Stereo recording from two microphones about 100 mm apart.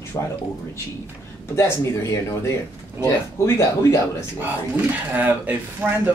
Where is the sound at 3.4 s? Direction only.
30° left (ahead or behind).